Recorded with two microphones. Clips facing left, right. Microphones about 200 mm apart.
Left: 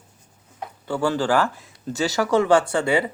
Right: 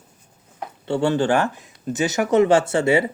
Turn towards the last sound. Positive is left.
turn(degrees=-25)  # may be behind; listen again after turning